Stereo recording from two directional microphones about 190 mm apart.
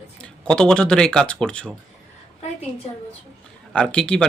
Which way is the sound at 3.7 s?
5° left (ahead or behind).